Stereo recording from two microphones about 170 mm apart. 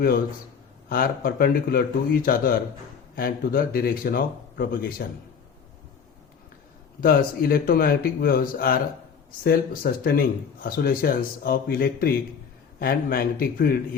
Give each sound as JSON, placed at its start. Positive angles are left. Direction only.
{"t": 0.9, "sound": "speech", "side_deg": 60}
{"t": 7.0, "sound": "speech", "side_deg": 60}